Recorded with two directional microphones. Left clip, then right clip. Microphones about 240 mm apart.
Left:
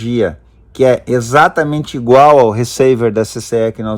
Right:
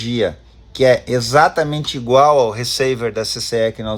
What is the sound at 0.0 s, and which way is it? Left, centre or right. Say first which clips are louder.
Speech: left 4 dB; left.